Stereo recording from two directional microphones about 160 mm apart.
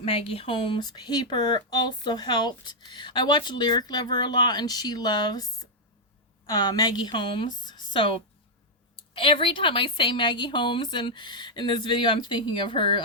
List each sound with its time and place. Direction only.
0.0 s speech: 35° left (ahead or behind)
6.5 s a woman's voice: 25° left (ahead or behind)